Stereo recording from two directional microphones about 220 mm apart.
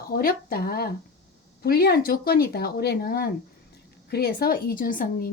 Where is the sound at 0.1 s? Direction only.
40° left (ahead or behind).